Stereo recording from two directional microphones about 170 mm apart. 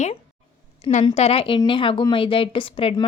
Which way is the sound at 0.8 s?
40° left (ahead or behind).